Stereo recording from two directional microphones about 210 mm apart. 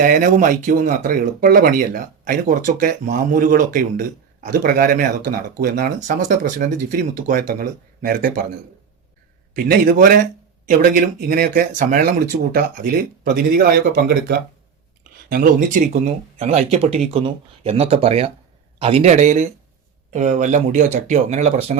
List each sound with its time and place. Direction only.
0.0 s a man's voice: 40° right (ahead or behind)
9.6 s a man's voice: 45° right (ahead or behind)
16.4 s a man's voice: 30° right (ahead or behind)